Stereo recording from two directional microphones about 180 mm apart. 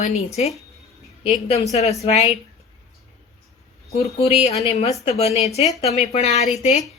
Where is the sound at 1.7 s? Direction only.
35° left (ahead or behind).